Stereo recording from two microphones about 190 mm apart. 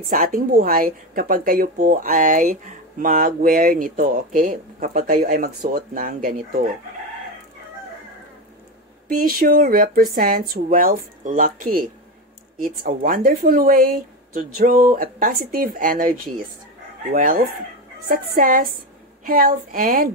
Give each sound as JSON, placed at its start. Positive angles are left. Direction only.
{"t": 0.0, "sound": "speech", "side_deg": -45}
{"t": 9.1, "sound": "speech", "side_deg": -50}